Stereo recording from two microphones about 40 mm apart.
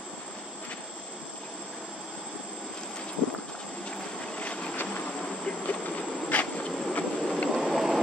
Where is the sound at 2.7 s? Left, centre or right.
Centre.